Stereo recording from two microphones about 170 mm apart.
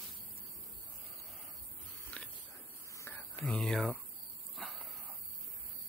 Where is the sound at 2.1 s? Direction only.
5° left (ahead or behind).